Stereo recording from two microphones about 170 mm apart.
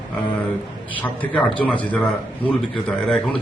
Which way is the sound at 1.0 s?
10° left (ahead or behind).